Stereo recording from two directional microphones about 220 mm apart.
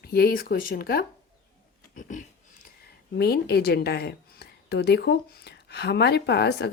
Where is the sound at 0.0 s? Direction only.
45° left (ahead or behind).